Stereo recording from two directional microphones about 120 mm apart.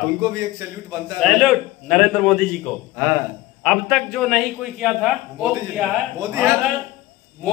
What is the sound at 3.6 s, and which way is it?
A man's voice, 5° left (ahead or behind).